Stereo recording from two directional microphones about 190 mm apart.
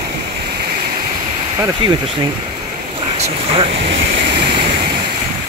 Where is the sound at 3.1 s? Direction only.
35° right (ahead or behind).